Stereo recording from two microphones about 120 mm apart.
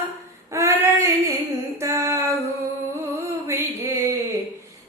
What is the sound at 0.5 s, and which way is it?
Female singing, 25° right (ahead or behind).